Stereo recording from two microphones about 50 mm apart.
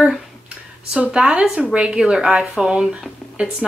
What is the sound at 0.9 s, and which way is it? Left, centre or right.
A woman's voice, right.